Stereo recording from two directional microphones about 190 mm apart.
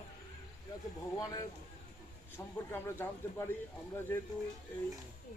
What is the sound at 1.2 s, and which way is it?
Speech, 20° left (ahead or behind).